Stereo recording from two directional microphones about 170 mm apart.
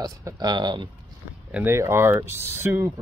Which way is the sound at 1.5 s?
15° right (ahead or behind).